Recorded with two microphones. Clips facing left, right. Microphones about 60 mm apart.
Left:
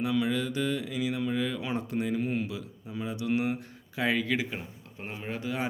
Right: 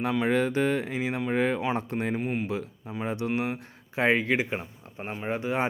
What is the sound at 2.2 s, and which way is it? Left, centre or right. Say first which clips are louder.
Speech: right 1 dB; centre.